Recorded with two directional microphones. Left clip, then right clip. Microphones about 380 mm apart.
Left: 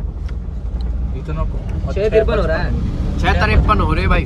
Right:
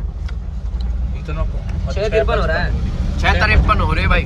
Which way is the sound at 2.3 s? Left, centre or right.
Centre.